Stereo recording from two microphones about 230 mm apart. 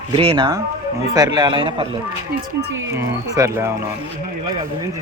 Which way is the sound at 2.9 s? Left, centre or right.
Centre.